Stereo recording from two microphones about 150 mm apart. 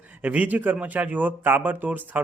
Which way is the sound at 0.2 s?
10° right (ahead or behind).